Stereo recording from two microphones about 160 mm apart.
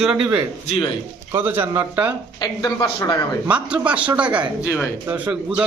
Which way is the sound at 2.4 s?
25° left (ahead or behind).